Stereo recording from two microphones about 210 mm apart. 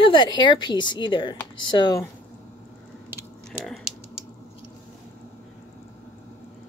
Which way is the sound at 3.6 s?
Centre (ahead or behind).